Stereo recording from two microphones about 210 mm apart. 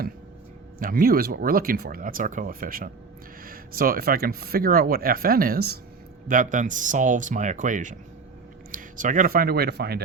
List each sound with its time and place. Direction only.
0.8 s speech: 40° right (ahead or behind)